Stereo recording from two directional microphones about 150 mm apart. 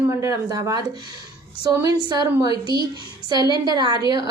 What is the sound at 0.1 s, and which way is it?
Speech, 20° right (ahead or behind).